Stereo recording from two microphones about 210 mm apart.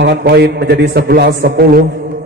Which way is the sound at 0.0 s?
50° right (ahead or behind).